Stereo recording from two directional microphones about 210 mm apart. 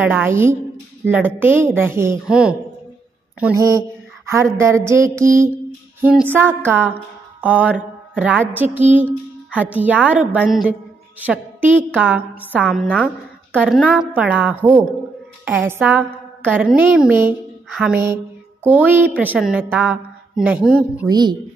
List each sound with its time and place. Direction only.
0.0 s a woman's voice: 10° right (ahead or behind)
21.1 s a woman's voice: 20° right (ahead or behind)